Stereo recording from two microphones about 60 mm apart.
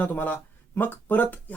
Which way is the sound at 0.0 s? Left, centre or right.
Left.